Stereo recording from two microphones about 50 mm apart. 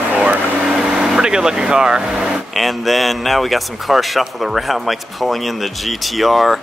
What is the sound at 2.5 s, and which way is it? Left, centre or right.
Speech, centre.